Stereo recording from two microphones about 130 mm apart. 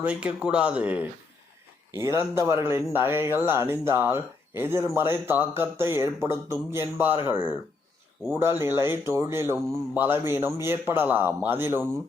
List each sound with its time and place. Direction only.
0.0 s speech: 10° right (ahead or behind)
1.9 s speech: 20° right (ahead or behind)